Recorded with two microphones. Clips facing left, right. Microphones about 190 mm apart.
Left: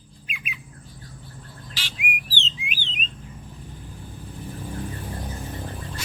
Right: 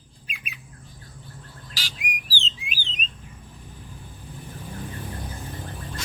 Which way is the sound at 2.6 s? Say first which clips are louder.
Left 2 dB; 40° right (ahead or behind).